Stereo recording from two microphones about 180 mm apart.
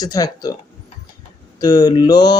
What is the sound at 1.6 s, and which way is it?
Speech, 20° left (ahead or behind).